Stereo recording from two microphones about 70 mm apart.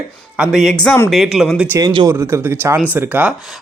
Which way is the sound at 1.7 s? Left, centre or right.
Right.